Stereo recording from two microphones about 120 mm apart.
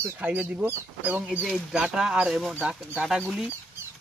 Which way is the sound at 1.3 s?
5° right (ahead or behind).